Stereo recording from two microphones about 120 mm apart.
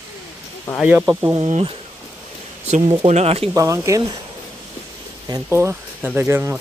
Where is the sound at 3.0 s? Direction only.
60° right (ahead or behind).